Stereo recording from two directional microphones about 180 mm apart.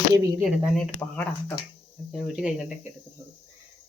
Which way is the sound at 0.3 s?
5° right (ahead or behind).